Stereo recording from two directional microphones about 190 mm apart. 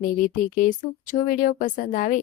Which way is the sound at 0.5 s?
45° left (ahead or behind).